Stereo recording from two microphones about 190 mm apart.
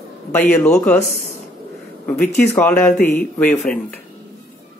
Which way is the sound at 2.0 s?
10° left (ahead or behind).